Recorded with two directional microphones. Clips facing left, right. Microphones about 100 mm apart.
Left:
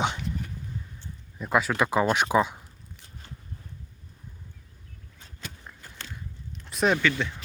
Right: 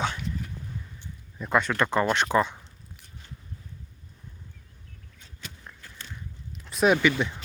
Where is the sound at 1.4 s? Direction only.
5° left (ahead or behind).